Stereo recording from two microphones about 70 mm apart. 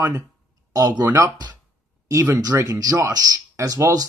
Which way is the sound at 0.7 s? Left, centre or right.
Right.